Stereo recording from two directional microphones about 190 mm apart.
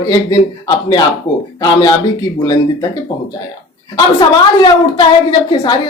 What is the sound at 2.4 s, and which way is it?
Speech, 20° left (ahead or behind).